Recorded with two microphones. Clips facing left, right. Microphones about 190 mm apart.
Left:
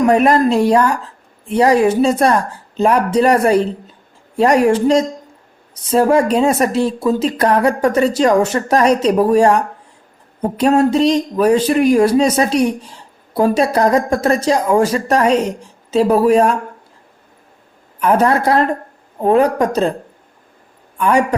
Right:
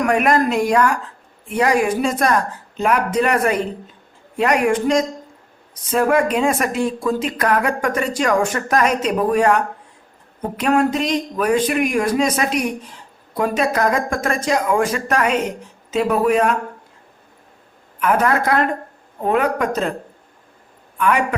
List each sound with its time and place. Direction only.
0.0 s speech: 30° left (ahead or behind)
10.6 s speech: 30° left (ahead or behind)
18.0 s speech: 30° left (ahead or behind)
21.0 s speech: 35° left (ahead or behind)